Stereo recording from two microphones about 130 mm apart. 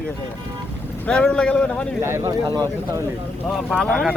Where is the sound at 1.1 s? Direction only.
5° left (ahead or behind).